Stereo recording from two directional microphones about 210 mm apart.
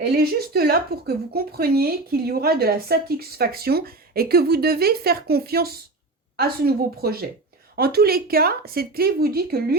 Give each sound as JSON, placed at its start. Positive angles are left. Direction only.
{"t": 0.0, "sound": "speech", "side_deg": -45}